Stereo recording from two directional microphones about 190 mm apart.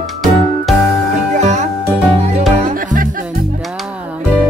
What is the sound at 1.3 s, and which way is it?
Music, 35° right (ahead or behind).